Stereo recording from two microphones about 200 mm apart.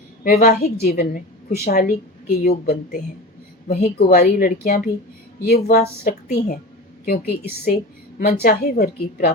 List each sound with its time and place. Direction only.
0.3 s a woman's voice: 45° left (ahead or behind)